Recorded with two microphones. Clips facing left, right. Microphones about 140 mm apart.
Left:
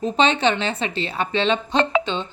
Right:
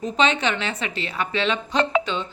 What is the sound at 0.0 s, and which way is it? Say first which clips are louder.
A woman's voice: left 3 dB; 30° left (ahead or behind).